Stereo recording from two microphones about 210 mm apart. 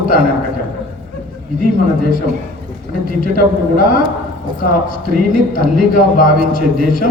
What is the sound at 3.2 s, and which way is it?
A man's voice, 40° left (ahead or behind).